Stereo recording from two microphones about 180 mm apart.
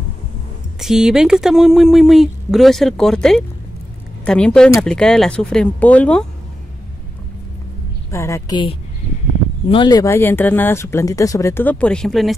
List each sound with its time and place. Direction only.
0.7 s speech: 5° right (ahead or behind)
8.1 s a woman's voice: 15° left (ahead or behind)
10.1 s speech: 10° left (ahead or behind)